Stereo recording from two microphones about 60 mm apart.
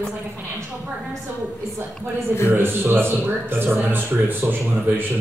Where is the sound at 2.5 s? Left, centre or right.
Right.